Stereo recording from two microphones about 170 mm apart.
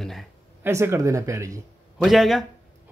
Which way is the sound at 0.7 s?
15° right (ahead or behind).